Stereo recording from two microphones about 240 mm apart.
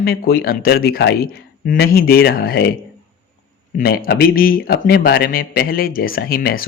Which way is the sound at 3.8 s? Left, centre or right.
Left.